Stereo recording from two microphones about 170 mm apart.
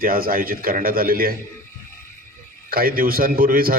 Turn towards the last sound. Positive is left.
turn(degrees=-60)  # may be behind; listen again after turning